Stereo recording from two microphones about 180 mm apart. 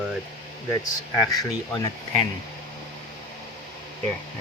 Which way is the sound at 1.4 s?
20° left (ahead or behind).